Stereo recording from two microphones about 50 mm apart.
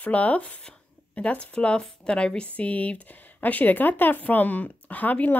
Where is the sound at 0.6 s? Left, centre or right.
Left.